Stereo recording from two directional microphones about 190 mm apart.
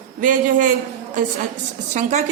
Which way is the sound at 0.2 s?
45° right (ahead or behind).